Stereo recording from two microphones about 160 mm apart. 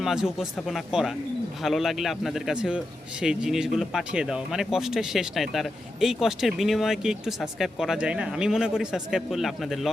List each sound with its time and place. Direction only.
0.0 s a man's voice: centre (ahead or behind)